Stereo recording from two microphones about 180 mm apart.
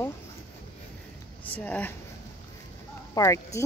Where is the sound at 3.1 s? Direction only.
15° left (ahead or behind).